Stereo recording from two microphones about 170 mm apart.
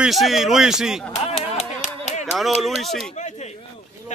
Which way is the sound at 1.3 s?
40° left (ahead or behind).